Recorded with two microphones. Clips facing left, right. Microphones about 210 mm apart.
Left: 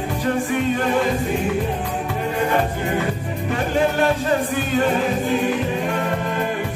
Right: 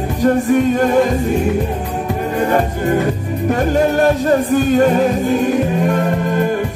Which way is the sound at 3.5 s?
45° right (ahead or behind).